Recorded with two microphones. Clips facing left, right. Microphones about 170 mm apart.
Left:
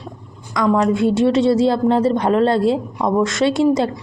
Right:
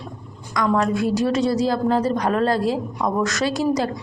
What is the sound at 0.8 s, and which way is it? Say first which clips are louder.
Speech: left 5 dB; 25° left (ahead or behind).